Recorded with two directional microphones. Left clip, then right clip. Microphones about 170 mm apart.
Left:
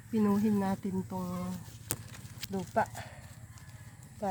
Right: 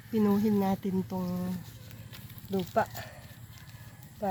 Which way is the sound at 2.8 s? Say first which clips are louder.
Right 1 dB; 15° right (ahead or behind).